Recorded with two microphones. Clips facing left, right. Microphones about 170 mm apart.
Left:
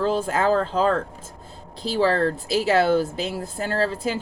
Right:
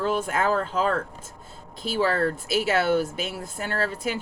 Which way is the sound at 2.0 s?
30° left (ahead or behind).